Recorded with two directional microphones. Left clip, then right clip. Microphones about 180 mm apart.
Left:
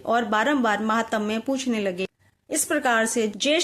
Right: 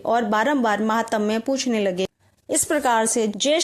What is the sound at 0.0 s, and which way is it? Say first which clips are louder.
A woman's voice: right 2 dB; 35° right (ahead or behind).